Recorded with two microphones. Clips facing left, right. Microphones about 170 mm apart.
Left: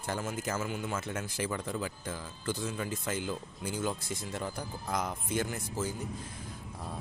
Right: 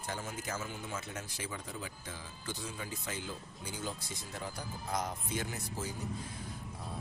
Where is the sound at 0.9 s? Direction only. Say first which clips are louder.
Left 6 dB; 50° left (ahead or behind); by 2.2 s 65° left (ahead or behind).